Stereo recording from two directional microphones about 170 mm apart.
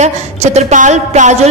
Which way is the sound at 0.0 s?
40° right (ahead or behind).